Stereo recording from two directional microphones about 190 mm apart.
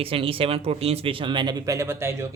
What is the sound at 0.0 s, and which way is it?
Speech, 30° right (ahead or behind).